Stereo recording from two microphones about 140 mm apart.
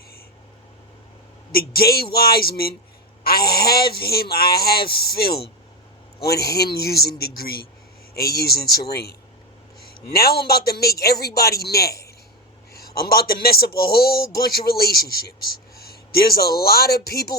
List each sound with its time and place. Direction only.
1.5 s a man's voice: 90° left
10.1 s a man's voice: 90° left